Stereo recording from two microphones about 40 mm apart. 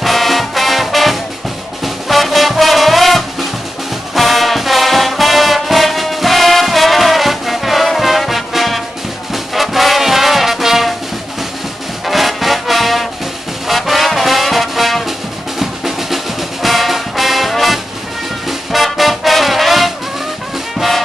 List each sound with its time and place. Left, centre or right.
0.0 s music: centre
12.1 s music: centre
15.6 s drum: centre
16.6 s music: centre